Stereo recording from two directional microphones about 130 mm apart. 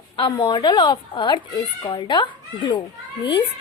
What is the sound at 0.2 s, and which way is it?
A woman's voice, 35° left (ahead or behind).